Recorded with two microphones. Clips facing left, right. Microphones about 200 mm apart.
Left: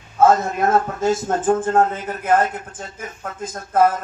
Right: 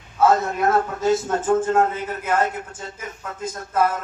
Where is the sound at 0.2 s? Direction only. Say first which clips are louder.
Left 3 dB; 50° left (ahead or behind).